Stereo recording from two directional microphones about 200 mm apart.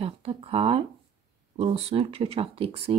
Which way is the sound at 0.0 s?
30° right (ahead or behind).